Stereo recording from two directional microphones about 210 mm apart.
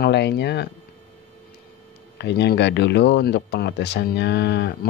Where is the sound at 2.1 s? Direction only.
55° left (ahead or behind).